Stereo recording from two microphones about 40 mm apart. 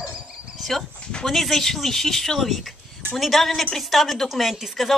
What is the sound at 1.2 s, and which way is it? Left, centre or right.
A woman's voice, centre.